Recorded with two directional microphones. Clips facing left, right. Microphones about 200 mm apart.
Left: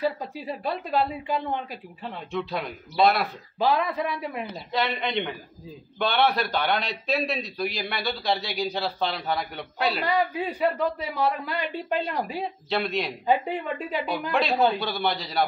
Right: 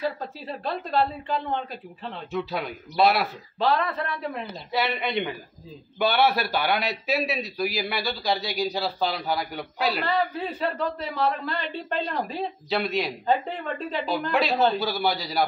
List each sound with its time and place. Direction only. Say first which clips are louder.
0.0 s a woman's voice: left 2 dB; 10° left (ahead or behind)
2.3 s a man's voice: right 1 dB; 5° right (ahead or behind)
3.5 s a woman's voice: left 1 dB; 10° left (ahead or behind)
4.7 s a man's voice: right 1 dB; 5° right (ahead or behind)
10.0 s a woman's voice: left 1 dB; 15° left (ahead or behind)
12.6 s a man's voice: right 1 dB; centre (ahead or behind)
13.3 s a woman's voice: left 2 dB; 10° left (ahead or behind)
14.7 s a man's voice: right 2 dB; centre (ahead or behind)